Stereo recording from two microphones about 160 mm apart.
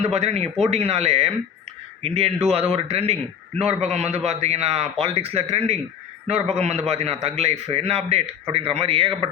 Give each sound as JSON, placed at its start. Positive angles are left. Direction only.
{"t": 0.0, "sound": "a man's voice", "side_deg": -40}